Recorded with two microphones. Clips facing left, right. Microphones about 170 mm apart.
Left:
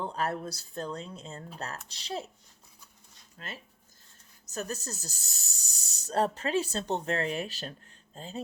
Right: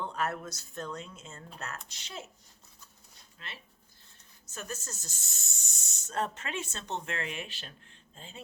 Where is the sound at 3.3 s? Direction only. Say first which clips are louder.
Left 5 dB; 40° left (ahead or behind).